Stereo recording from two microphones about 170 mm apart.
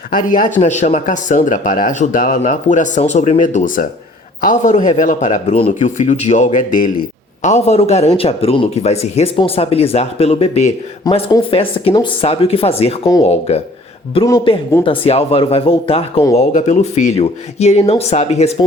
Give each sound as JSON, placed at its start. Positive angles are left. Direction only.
{"t": 0.1, "sound": "speech", "side_deg": 50}
{"t": 7.4, "sound": "a man's voice", "side_deg": 40}
{"t": 11.1, "sound": "speech", "side_deg": 20}
{"t": 11.5, "sound": "a man's voice", "side_deg": 30}